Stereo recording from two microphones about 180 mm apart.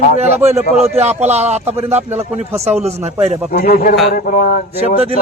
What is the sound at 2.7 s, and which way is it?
Speech, 35° right (ahead or behind).